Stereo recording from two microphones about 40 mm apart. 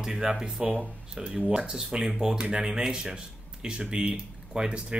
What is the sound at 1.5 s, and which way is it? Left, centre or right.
Speech, centre.